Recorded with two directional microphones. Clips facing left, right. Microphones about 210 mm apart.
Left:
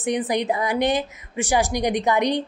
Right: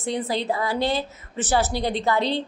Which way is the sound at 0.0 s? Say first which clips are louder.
Left 3 dB; 15° left (ahead or behind).